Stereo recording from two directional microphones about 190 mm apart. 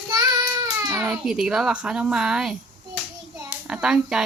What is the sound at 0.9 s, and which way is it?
A child's voice, centre (ahead or behind).